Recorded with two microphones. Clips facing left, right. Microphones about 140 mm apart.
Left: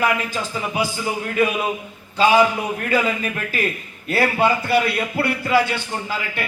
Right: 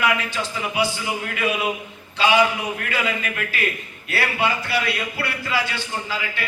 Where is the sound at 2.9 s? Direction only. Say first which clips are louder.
Left 7 dB; 40° left (ahead or behind).